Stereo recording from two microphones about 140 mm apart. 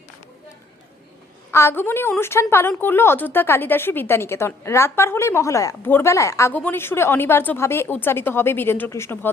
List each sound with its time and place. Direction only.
1.5 s a woman's voice: 15° left (ahead or behind)